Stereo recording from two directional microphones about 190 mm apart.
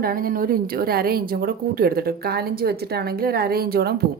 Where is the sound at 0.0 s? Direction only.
50° right (ahead or behind).